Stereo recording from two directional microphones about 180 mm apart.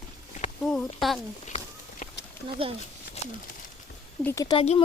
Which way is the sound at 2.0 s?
45° left (ahead or behind).